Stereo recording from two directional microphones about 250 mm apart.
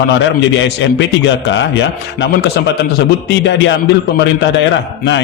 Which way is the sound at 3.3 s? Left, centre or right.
Left.